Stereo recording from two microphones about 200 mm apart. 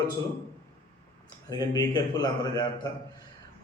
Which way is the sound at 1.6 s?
20° left (ahead or behind).